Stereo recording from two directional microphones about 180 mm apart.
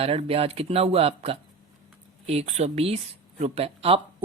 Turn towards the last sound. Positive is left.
turn(degrees=-35)  # may be behind; listen again after turning